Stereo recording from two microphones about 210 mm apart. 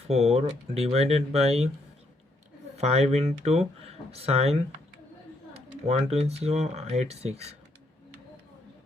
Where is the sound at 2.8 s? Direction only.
30° right (ahead or behind).